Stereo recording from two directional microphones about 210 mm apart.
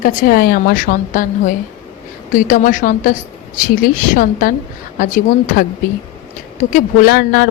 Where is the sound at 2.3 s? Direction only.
40° left (ahead or behind).